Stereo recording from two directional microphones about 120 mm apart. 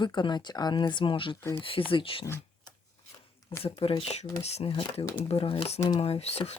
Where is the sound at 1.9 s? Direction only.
45° left (ahead or behind).